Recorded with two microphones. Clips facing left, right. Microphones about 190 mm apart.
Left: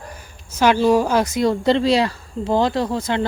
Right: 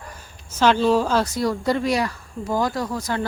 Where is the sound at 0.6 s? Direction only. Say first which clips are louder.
Left 2 dB; 10° left (ahead or behind).